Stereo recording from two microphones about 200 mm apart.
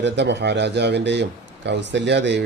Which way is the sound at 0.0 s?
60° right (ahead or behind).